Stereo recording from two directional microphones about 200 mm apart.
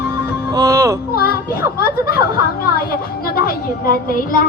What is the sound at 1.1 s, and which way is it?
Children playing, 50° left (ahead or behind).